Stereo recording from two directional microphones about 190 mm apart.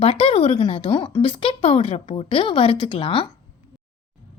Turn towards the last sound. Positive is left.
turn(degrees=25)  # may be behind; listen again after turning